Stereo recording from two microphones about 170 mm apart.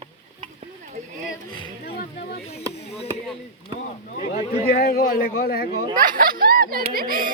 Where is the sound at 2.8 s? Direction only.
40° left (ahead or behind).